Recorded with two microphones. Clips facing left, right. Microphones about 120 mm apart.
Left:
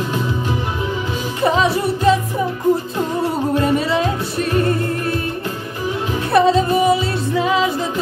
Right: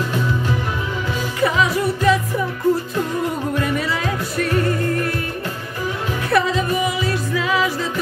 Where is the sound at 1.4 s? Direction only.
25° left (ahead or behind).